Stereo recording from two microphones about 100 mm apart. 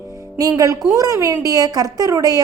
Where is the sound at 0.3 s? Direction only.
35° right (ahead or behind).